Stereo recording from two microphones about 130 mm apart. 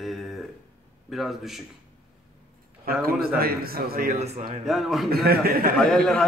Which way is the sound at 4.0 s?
70° right (ahead or behind).